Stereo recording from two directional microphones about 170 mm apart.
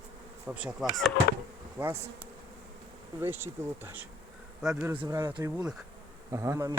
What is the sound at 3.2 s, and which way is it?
Bee, 15° right (ahead or behind).